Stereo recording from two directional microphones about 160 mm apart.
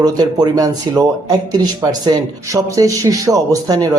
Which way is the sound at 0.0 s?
25° right (ahead or behind).